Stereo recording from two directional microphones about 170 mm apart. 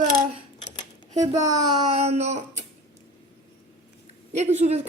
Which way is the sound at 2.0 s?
40° right (ahead or behind).